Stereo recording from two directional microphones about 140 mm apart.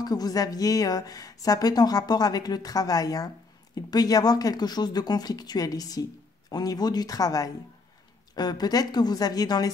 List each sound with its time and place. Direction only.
0.0 s a woman's voice: 30° left (ahead or behind)